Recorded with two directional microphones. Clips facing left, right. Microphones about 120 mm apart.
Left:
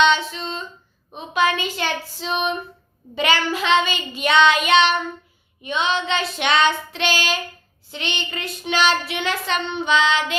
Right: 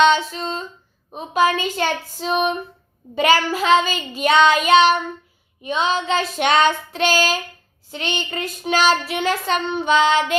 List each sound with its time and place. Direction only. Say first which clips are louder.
0.0 s female singing: right 2 dB; 40° right (ahead or behind)
1.1 s child singing: right 2 dB; 40° right (ahead or behind)